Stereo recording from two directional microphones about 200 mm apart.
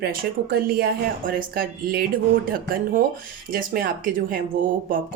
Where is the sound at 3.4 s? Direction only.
45° right (ahead or behind).